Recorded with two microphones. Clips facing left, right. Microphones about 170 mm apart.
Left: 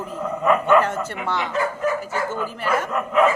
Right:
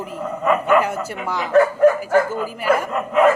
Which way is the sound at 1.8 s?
60° right (ahead or behind).